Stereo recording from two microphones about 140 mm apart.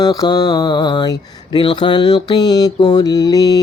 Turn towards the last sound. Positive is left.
turn(degrees=25)  # may be behind; listen again after turning